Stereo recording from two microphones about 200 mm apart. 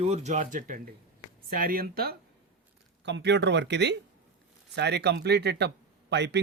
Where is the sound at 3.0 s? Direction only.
60° right (ahead or behind).